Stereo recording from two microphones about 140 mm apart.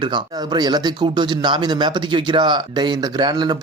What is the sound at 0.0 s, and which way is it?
Speech, 30° right (ahead or behind).